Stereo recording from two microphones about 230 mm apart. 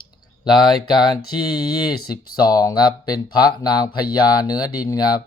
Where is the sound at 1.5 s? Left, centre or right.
Centre.